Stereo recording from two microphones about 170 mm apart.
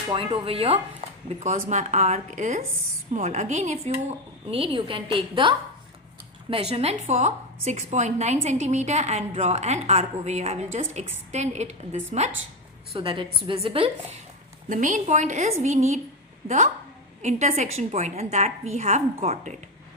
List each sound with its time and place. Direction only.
0.1 s a woman's voice: 30° right (ahead or behind)
1.4 s a woman's voice: 50° right (ahead or behind)
4.5 s a woman's voice: 30° right (ahead or behind)
14.7 s a woman's voice: 50° right (ahead or behind)
17.2 s a woman's voice: 40° right (ahead or behind)